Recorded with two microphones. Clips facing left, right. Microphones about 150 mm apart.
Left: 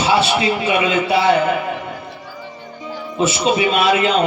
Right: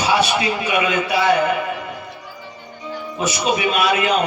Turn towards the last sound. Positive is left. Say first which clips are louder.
# left 3 dB
turn(degrees=30)  # may be behind; listen again after turning